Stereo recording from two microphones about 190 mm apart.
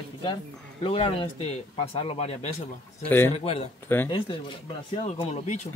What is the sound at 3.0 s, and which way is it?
Speech, 10° left (ahead or behind).